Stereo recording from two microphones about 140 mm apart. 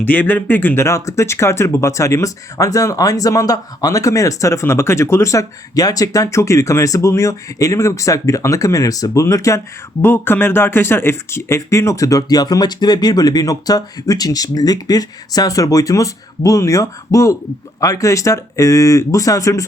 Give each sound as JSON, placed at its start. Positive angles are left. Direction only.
{"t": 0.1, "sound": "speech", "side_deg": 10}